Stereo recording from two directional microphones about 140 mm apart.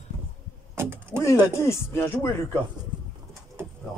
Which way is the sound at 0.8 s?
15° right (ahead or behind).